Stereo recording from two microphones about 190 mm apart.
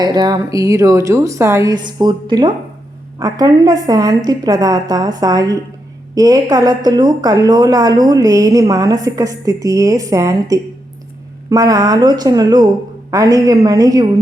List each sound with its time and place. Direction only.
0.0 s a woman's voice: 20° right (ahead or behind)